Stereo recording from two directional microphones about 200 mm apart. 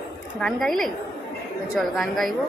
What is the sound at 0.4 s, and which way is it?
A woman's voice, 5° left (ahead or behind).